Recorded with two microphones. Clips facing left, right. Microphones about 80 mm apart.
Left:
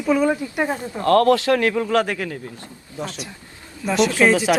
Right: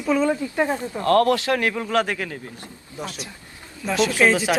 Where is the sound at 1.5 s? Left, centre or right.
Left.